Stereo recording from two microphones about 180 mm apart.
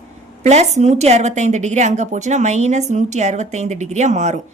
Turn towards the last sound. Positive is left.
turn(degrees=-40)  # may be behind; listen again after turning